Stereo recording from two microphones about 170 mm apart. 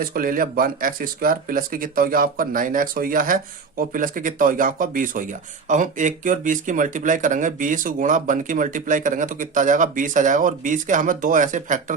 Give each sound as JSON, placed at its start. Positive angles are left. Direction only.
{"t": 0.0, "sound": "speech", "side_deg": -55}